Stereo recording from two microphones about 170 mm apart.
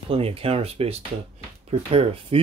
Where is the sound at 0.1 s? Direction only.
35° right (ahead or behind).